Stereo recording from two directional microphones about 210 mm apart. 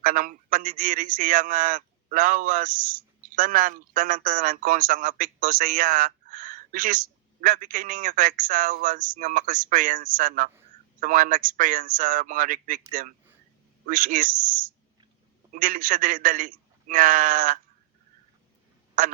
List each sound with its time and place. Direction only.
0.0 s a man's voice: 40° right (ahead or behind)
15.5 s a man's voice: 40° right (ahead or behind)
19.0 s a man's voice: 40° right (ahead or behind)